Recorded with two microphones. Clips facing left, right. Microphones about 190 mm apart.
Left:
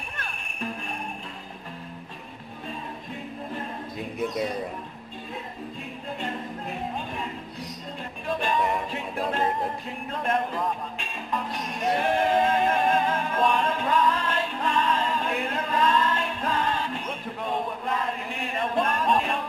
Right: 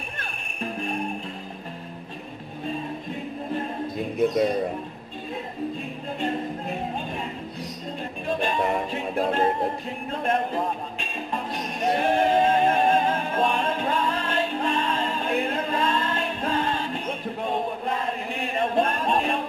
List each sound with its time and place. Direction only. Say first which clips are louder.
0.2 s music: right 1 dB; 25° right (ahead or behind)
8.3 s music: right 1 dB; 25° right (ahead or behind)